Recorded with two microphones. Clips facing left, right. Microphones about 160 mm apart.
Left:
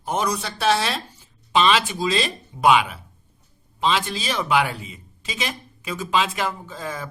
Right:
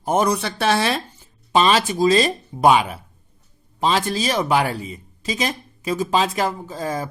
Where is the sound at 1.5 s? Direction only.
40° right (ahead or behind).